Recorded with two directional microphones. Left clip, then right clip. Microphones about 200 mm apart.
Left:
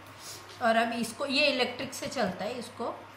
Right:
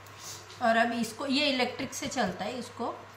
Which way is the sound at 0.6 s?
Centre (ahead or behind).